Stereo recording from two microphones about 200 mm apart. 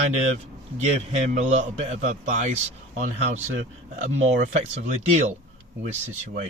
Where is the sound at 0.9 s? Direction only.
40° right (ahead or behind).